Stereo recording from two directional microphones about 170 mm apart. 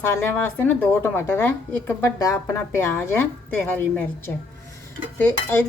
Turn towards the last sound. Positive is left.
turn(degrees=10)  # may be behind; listen again after turning